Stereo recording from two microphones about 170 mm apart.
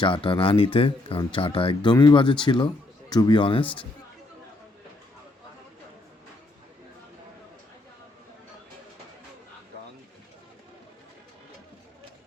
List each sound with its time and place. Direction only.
0.0 s speech: 30° left (ahead or behind)